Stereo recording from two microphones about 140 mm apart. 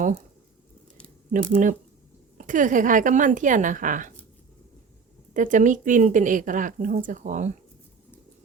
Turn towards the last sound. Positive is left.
turn(degrees=-60)  # may be behind; listen again after turning